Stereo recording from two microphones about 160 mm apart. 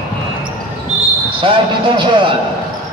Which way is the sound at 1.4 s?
30° right (ahead or behind).